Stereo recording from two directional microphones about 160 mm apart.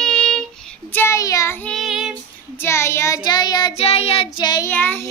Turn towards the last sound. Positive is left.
turn(degrees=10)  # may be behind; listen again after turning